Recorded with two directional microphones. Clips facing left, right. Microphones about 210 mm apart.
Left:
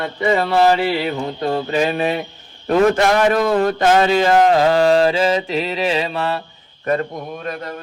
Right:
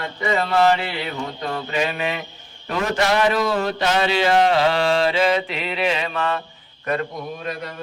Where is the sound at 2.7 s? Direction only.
50° left (ahead or behind); by 6.4 s 35° left (ahead or behind).